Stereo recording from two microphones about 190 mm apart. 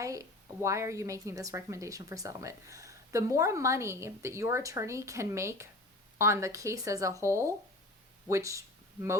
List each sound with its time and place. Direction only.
0.0 s a woman's voice: 15° right (ahead or behind)